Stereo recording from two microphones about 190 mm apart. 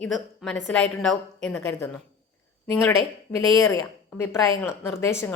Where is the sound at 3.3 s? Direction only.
15° left (ahead or behind).